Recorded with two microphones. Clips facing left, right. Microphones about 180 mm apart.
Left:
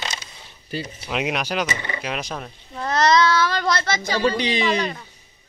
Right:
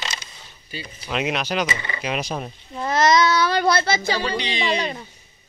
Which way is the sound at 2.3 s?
15° right (ahead or behind).